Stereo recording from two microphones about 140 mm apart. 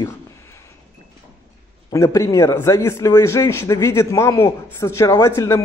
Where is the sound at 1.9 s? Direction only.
20° left (ahead or behind).